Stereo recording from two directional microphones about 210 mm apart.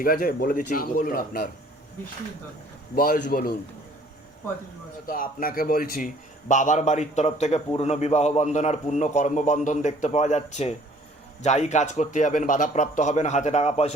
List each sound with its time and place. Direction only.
0.0 s a man's voice: 45° left (ahead or behind)
2.9 s a man's voice: 45° left (ahead or behind)
5.0 s a man's voice: 40° left (ahead or behind)